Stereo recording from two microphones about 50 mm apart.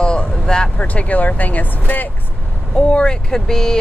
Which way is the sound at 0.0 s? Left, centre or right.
Centre.